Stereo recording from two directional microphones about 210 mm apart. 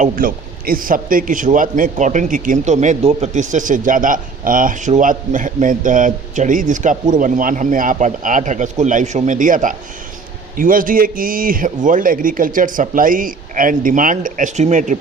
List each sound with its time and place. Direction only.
0.0 s a man's voice: 40° right (ahead or behind)